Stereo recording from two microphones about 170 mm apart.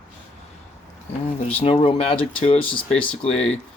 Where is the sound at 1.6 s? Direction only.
30° left (ahead or behind).